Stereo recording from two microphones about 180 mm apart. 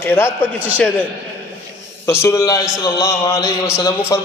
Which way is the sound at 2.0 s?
15° left (ahead or behind).